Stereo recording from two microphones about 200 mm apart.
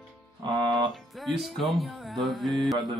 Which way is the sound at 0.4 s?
25° right (ahead or behind).